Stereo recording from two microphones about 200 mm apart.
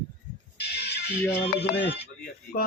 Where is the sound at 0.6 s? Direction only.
55° left (ahead or behind).